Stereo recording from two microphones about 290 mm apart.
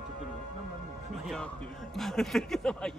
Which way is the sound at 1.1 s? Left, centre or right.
Centre.